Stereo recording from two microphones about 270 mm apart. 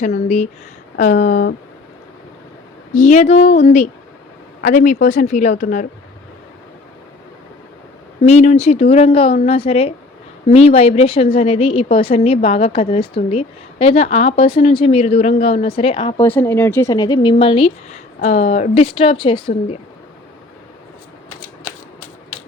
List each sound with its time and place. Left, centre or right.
0.0 s speech: left
2.9 s speech: left
8.2 s speech: left
16.2 s speech: centre